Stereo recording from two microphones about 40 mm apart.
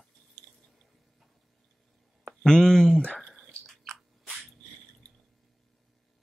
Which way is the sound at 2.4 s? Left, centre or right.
Centre.